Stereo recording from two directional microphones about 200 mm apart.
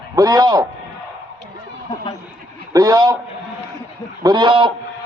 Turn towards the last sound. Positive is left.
turn(degrees=-25)  # may be behind; listen again after turning